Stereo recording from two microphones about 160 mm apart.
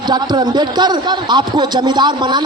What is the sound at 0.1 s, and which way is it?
A man's voice, 25° right (ahead or behind).